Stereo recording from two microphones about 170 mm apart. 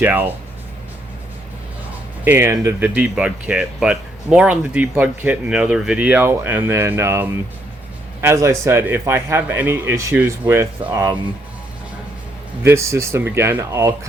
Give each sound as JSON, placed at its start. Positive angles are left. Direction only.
{"t": 0.0, "sound": "speech", "side_deg": -10}
{"t": 2.2, "sound": "speech", "side_deg": -15}
{"t": 12.6, "sound": "speech", "side_deg": -15}